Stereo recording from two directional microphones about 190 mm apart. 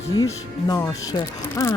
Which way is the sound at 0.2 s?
15° left (ahead or behind).